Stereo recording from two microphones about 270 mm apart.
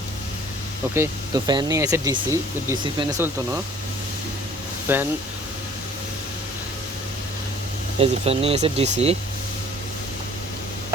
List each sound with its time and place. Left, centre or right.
0.9 s speech: centre
4.9 s speech: centre
7.9 s speech: right